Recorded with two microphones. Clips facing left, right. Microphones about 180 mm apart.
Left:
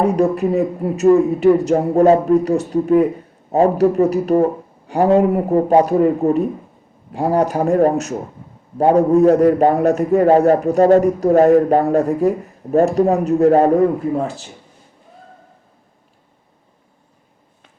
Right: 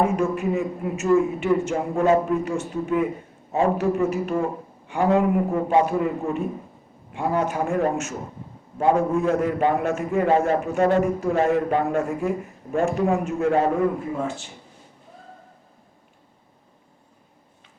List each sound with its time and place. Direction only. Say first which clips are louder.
0.0 s a man's voice: left 6 dB; 35° left (ahead or behind)